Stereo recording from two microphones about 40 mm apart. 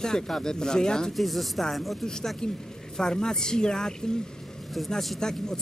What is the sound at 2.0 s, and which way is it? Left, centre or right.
Speech, centre.